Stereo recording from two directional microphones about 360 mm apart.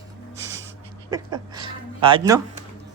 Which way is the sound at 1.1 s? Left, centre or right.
Centre.